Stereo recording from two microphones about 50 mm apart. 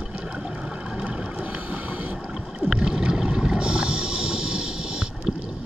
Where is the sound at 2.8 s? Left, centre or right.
Centre.